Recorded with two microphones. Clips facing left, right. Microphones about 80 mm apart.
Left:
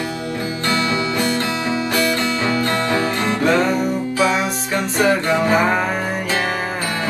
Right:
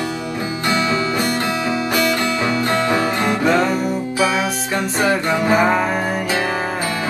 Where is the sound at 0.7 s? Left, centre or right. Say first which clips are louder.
Right 1 dB; right.